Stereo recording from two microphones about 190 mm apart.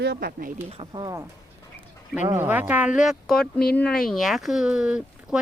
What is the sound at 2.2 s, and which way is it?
Speech, 10° right (ahead or behind).